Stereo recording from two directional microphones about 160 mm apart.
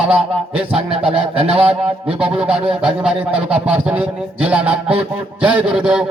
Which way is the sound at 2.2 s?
5° right (ahead or behind).